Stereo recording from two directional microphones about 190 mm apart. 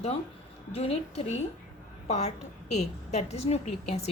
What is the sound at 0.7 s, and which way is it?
A woman's voice, 30° left (ahead or behind).